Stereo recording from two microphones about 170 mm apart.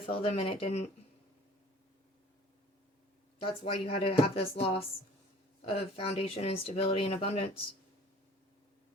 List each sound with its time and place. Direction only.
0.0 s speech: 35° left (ahead or behind)
3.4 s speech: 35° left (ahead or behind)